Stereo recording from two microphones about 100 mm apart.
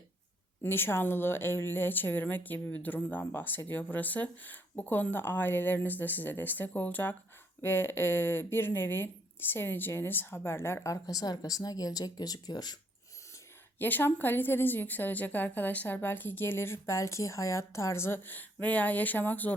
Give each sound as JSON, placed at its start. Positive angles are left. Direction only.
{"t": 0.6, "sound": "a woman's voice", "side_deg": 25}
{"t": 13.7, "sound": "a woman's voice", "side_deg": 20}